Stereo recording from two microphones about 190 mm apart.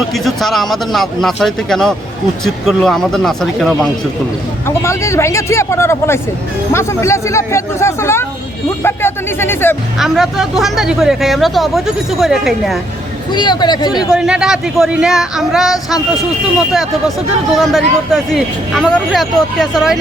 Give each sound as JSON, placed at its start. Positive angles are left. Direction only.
{"t": 0.1, "sound": "speech", "side_deg": 0}
{"t": 4.6, "sound": "speech", "side_deg": 15}
{"t": 10.0, "sound": "speech", "side_deg": 0}
{"t": 13.3, "sound": "speech", "side_deg": 25}
{"t": 14.1, "sound": "speech", "side_deg": -5}
{"t": 17.6, "sound": "speech", "side_deg": 0}